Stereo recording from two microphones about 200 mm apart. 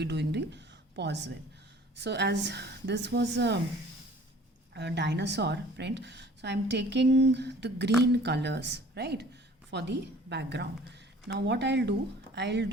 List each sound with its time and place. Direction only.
0.0 s a woman's voice: 60° right (ahead or behind)
4.7 s a woman's voice: 60° right (ahead or behind)